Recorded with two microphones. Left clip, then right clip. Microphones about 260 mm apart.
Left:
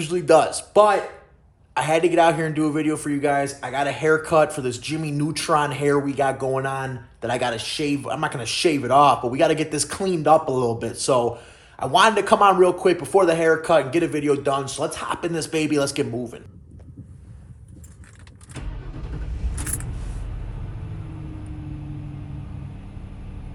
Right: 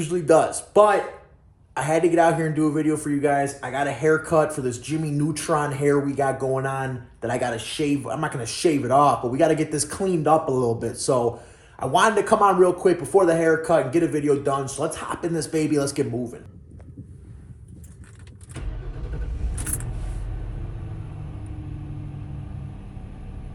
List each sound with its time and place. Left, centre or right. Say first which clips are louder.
0.1 s a man's voice: left 2 dB; centre
2.1 s speech: left 1 dB; centre
3.2 s speech: left 1 dB; centre
6.5 s a man's voice: left 1 dB; centre
10.0 s a man's voice: left 2 dB; centre
10.5 s speech: even; centre
11.8 s a man's voice: left 3 dB; centre
12.2 s speech: left 2 dB; centre
14.8 s a man's voice: left 1 dB; centre
15.1 s speech: left 1 dB; centre
19.5 s a sound: left 1 dB; centre